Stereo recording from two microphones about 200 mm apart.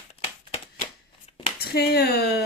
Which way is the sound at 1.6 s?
50° left (ahead or behind).